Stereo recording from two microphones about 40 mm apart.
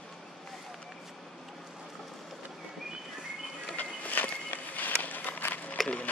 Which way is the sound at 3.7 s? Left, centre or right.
Left.